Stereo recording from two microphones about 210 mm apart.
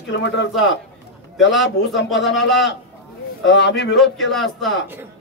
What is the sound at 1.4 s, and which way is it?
Speech, 60° left (ahead or behind).